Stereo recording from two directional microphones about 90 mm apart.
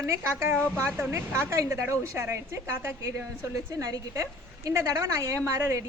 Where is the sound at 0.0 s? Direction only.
25° right (ahead or behind).